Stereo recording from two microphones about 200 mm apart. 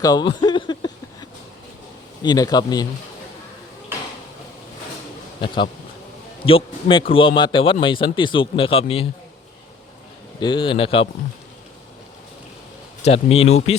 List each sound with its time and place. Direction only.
0.0 s speech: 20° left (ahead or behind)
2.2 s speech: 20° left (ahead or behind)
6.4 s speech: 25° left (ahead or behind)
10.4 s speech: 25° left (ahead or behind)
13.1 s speech: 30° left (ahead or behind)